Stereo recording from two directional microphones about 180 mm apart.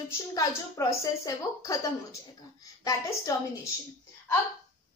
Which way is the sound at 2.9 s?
20° left (ahead or behind).